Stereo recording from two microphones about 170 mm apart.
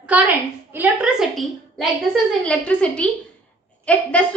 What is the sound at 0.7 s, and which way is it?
A child's voice, 10° right (ahead or behind).